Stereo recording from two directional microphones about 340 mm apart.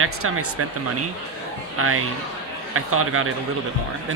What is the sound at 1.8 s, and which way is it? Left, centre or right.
Speech, right.